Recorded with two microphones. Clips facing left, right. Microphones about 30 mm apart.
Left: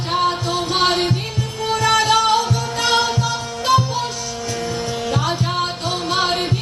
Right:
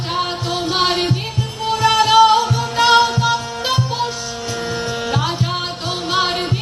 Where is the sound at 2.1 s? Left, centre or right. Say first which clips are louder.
Right 4 dB; right.